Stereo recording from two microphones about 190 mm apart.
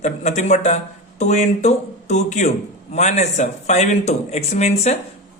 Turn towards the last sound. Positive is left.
turn(degrees=35)  # may be behind; listen again after turning